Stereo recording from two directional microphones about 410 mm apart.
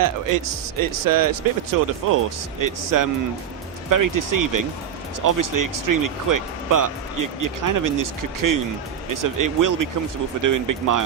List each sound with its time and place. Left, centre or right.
0.0 s speech: right